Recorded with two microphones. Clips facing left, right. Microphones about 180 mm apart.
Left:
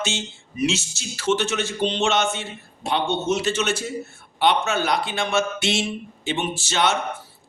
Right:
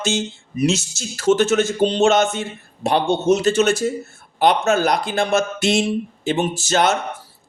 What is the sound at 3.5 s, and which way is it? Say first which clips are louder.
Speech: right 7 dB; 40° right (ahead or behind).